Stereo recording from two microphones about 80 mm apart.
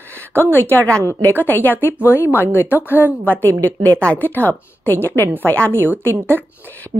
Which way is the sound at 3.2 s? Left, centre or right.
Left.